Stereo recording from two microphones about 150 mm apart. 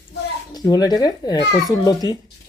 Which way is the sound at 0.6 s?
25° left (ahead or behind).